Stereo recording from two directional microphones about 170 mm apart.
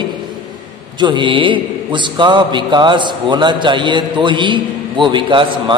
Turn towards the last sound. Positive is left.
turn(degrees=-30)  # may be behind; listen again after turning